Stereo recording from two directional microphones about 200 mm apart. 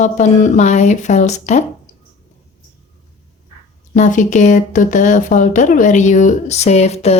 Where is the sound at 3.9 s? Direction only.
40° left (ahead or behind).